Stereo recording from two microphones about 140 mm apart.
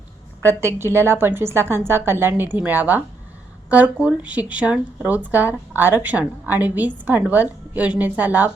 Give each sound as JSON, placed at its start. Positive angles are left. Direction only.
{"t": 0.8, "sound": "speech", "side_deg": -20}